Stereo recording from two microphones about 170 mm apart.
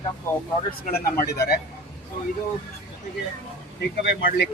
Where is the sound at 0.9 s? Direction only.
60° left (ahead or behind).